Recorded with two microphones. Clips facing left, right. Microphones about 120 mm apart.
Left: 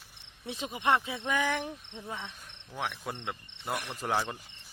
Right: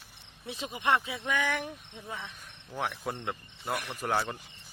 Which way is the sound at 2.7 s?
5° right (ahead or behind).